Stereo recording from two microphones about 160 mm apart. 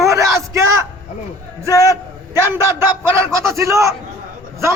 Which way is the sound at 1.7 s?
20° left (ahead or behind).